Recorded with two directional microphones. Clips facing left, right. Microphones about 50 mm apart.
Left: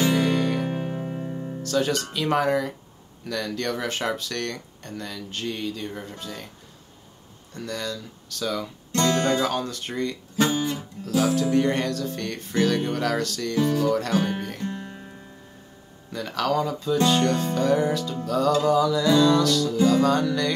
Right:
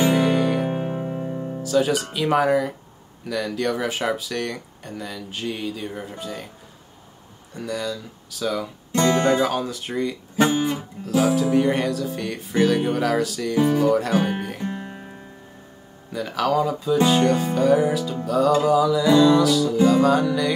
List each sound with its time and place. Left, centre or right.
0.0 s music: centre
1.0 s music: centre
1.6 s speech: centre
7.5 s speech: centre
16.1 s speech: centre